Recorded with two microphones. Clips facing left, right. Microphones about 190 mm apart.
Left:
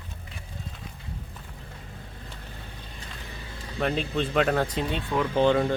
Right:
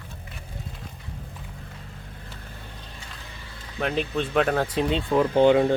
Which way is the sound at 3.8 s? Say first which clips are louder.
Right 1 dB; centre (ahead or behind).